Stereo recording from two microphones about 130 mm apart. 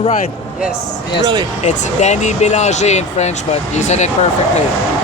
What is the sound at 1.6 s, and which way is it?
Speech, 65° left (ahead or behind).